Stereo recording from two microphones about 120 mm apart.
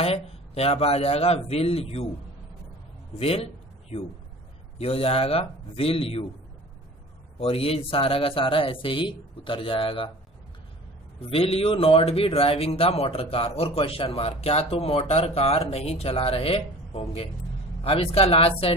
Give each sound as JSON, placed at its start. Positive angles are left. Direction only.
{"t": 0.0, "sound": "speech", "side_deg": 55}
{"t": 3.2, "sound": "speech", "side_deg": 55}
{"t": 4.7, "sound": "speech", "side_deg": 55}
{"t": 7.3, "sound": "speech", "side_deg": 55}
{"t": 11.1, "sound": "speech", "side_deg": 55}